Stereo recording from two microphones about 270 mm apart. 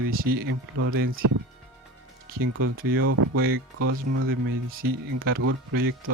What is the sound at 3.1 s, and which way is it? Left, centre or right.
Speech, right.